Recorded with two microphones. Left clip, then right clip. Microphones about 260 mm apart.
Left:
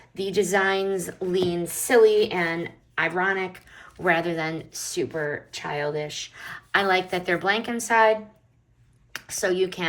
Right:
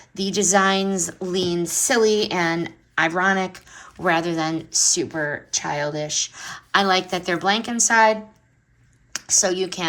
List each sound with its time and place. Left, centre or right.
0.1 s speech: right